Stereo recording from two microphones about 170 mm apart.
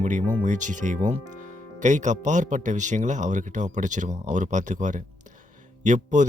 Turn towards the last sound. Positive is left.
turn(degrees=-45)  # may be behind; listen again after turning